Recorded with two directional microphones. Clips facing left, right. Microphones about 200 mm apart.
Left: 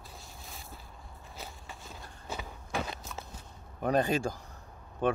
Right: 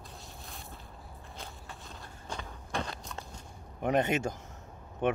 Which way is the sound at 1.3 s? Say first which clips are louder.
Left 1 dB; 5° left (ahead or behind).